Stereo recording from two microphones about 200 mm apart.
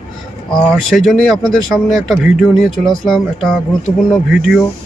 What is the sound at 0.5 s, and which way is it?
Speech, centre (ahead or behind).